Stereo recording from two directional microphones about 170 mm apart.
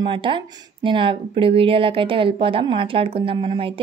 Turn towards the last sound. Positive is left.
turn(degrees=-30)  # may be behind; listen again after turning